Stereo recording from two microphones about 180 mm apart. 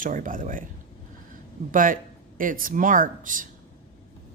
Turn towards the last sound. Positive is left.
turn(degrees=-45)  # may be behind; listen again after turning